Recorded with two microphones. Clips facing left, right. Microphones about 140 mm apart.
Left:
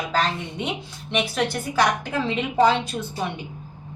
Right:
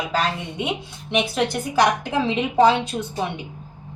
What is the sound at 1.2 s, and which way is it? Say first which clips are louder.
A woman's voice: right 2 dB; 20° right (ahead or behind).